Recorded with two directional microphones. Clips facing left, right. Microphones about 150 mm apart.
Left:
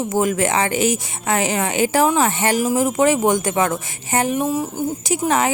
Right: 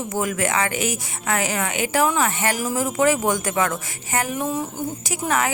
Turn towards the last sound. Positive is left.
turn(degrees=25)  # may be behind; listen again after turning